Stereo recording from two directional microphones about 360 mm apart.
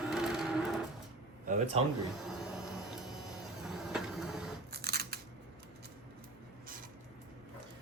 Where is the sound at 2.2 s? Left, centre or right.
Centre.